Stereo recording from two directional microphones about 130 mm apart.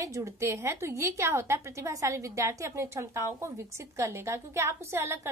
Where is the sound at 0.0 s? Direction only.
25° right (ahead or behind).